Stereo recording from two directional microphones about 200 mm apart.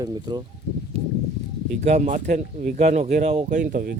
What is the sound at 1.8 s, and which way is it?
Speech, 35° right (ahead or behind).